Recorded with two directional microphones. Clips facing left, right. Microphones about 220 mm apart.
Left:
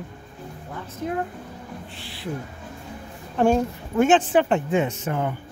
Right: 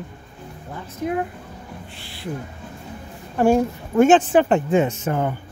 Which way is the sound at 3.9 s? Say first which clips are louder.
Right 4 dB; 45° right (ahead or behind).